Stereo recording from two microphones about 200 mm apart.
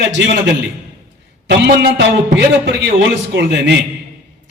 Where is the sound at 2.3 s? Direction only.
60° right (ahead or behind).